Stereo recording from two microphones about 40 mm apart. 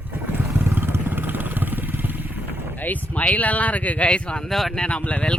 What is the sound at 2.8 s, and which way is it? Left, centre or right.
Speech, left.